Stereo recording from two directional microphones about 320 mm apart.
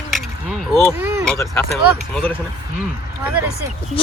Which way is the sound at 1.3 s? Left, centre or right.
Centre.